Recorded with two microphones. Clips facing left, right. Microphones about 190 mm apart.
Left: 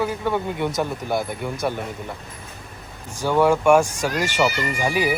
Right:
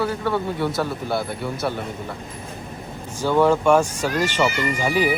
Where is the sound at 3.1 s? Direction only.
10° left (ahead or behind).